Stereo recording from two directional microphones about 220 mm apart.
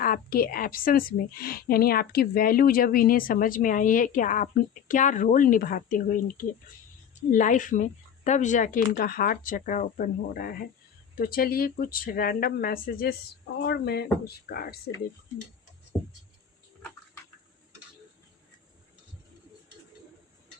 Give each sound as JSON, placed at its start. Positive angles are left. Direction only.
{"t": 0.0, "sound": "a woman's voice", "side_deg": 40}